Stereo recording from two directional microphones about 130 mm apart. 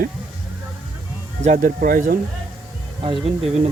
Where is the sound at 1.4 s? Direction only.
90° right.